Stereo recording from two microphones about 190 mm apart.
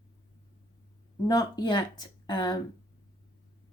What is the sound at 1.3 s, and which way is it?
Speech, 20° left (ahead or behind).